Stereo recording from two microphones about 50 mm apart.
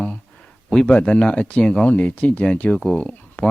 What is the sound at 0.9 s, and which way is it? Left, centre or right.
Speech, left.